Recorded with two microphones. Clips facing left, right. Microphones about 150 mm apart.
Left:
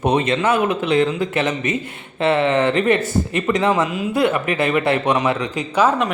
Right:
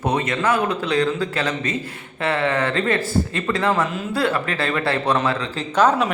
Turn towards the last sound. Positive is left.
turn(degrees=10)  # may be behind; listen again after turning